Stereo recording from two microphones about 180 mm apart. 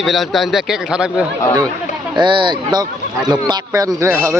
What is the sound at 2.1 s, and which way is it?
Speech, 25° right (ahead or behind).